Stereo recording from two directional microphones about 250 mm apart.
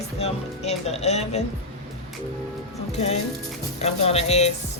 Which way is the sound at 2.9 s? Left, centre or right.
Left.